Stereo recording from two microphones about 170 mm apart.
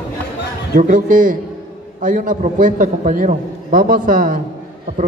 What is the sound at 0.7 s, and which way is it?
A man's voice, 50° right (ahead or behind).